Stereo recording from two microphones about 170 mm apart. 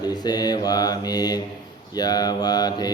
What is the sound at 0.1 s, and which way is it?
Mantra, 25° left (ahead or behind).